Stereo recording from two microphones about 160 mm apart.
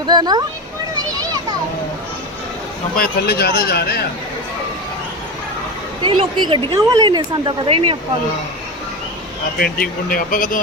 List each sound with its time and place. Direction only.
0.0 s speech: 25° right (ahead or behind)
3.0 s a man's voice: 90° left
6.0 s a woman's voice: 30° right (ahead or behind)
9.6 s speech: 65° left (ahead or behind)